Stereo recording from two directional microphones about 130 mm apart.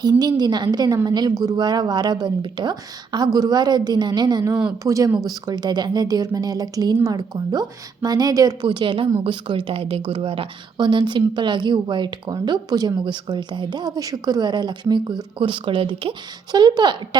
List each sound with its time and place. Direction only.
0.0 s a woman's voice: 30° right (ahead or behind)
8.6 s a woman's voice: 40° right (ahead or behind)